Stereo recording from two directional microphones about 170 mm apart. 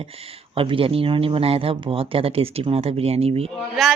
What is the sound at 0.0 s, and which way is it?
Speech, 35° right (ahead or behind).